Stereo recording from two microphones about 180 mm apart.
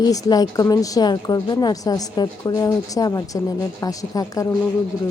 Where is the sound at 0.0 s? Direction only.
20° left (ahead or behind).